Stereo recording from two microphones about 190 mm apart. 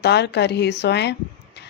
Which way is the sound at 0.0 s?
60° left (ahead or behind).